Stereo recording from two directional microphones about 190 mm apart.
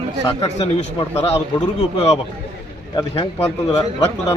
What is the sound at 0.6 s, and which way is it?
Speech, 35° left (ahead or behind).